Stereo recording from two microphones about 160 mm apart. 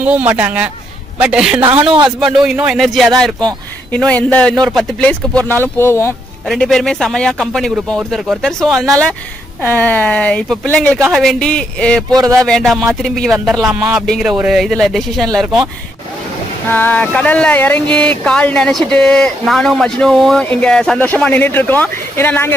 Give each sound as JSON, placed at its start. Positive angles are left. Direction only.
{"t": 0.0, "sound": "speech", "side_deg": -10}
{"t": 1.6, "sound": "a man's voice", "side_deg": -35}
{"t": 2.1, "sound": "speech", "side_deg": -5}
{"t": 6.5, "sound": "speech", "side_deg": 0}
{"t": 12.1, "sound": "a man's voice", "side_deg": -25}
{"t": 12.4, "sound": "speech", "side_deg": 0}
{"t": 16.7, "sound": "speech", "side_deg": 10}